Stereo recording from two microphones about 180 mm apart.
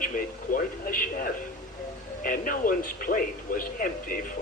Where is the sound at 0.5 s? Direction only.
55° left (ahead or behind).